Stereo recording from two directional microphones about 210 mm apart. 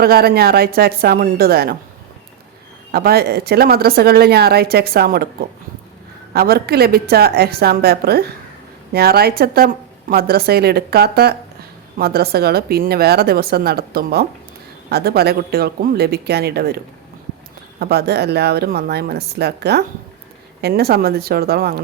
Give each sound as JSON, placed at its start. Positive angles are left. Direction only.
{"t": 0.0, "sound": "a woman's voice", "side_deg": -45}
{"t": 2.9, "sound": "a woman's voice", "side_deg": -45}
{"t": 6.3, "sound": "a woman's voice", "side_deg": -45}